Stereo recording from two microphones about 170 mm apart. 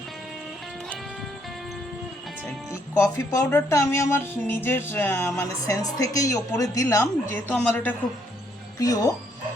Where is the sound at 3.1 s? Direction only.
10° left (ahead or behind).